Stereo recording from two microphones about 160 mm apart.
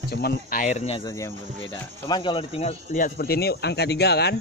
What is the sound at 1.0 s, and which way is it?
Speech, 20° left (ahead or behind).